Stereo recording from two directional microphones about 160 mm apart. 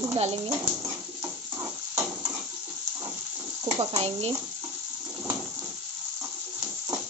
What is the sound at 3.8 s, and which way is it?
Speech, 35° right (ahead or behind).